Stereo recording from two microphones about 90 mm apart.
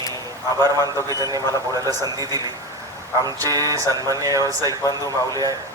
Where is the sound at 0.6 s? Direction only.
45° right (ahead or behind).